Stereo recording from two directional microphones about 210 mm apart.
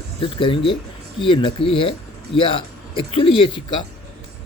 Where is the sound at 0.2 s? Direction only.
25° left (ahead or behind).